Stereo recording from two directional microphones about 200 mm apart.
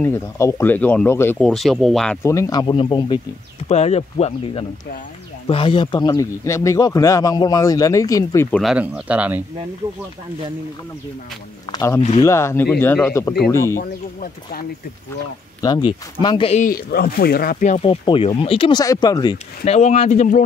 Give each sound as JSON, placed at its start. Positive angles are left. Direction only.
{"t": 0.0, "sound": "speech", "side_deg": 15}
{"t": 1.4, "sound": "speech", "side_deg": 0}
{"t": 2.2, "sound": "speech", "side_deg": 15}
{"t": 8.5, "sound": "speech", "side_deg": 5}
{"t": 8.7, "sound": "speech", "side_deg": -5}
{"t": 11.7, "sound": "speech", "side_deg": 15}
{"t": 13.7, "sound": "speech", "side_deg": 45}
{"t": 15.6, "sound": "speech", "side_deg": 20}
{"t": 16.6, "sound": "speech", "side_deg": 50}
{"t": 19.3, "sound": "speech", "side_deg": 35}